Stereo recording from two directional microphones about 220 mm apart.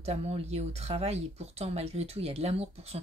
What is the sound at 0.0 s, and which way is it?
Speech, 30° right (ahead or behind).